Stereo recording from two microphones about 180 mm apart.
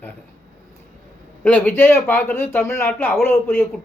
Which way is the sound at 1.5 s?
10° left (ahead or behind).